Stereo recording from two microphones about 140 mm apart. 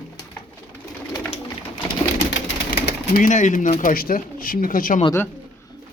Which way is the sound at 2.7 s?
80° left.